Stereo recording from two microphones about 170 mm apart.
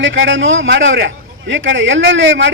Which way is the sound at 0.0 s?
90° right.